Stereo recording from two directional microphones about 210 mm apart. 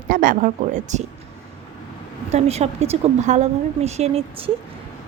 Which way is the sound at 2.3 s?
30° right (ahead or behind).